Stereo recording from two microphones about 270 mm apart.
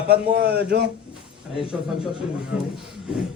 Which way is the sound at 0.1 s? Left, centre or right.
Right.